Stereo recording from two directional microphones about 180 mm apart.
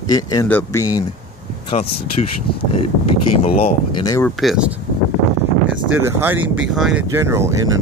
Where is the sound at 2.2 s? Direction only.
35° left (ahead or behind).